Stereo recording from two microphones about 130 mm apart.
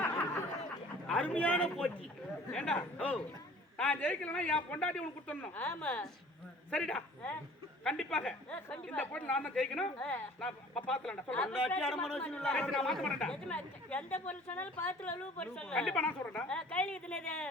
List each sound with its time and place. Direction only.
1.0 s a man's voice: 10° left (ahead or behind)